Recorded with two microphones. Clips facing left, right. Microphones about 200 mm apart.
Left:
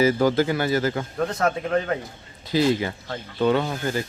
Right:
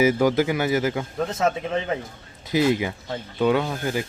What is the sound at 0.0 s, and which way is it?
A man's voice, 15° right (ahead or behind).